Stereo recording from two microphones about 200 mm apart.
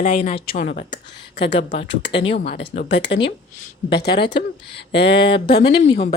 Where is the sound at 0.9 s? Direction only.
60° left (ahead or behind).